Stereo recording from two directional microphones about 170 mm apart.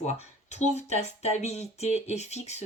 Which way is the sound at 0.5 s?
40° left (ahead or behind).